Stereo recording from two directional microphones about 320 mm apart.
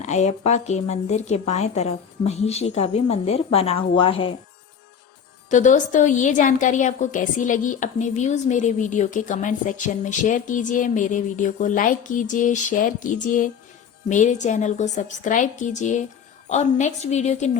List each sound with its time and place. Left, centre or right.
0.0 s a woman's voice: left
5.5 s a woman's voice: left